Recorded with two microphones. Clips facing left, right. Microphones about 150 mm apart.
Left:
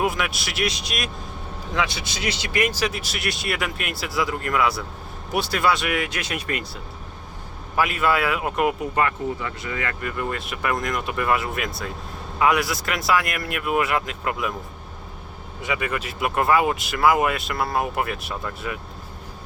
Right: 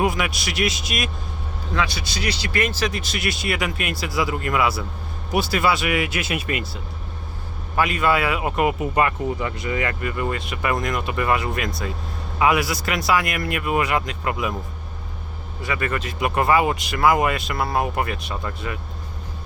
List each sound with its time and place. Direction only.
0.0 s speech: centre (ahead or behind)
1.7 s speech: 20° left (ahead or behind); by 6.7 s 5° right (ahead or behind)
7.8 s speech: 5° left (ahead or behind)
9.0 s speech: 15° right (ahead or behind)
10.0 s speech: 5° right (ahead or behind)
15.6 s speech: 15° left (ahead or behind)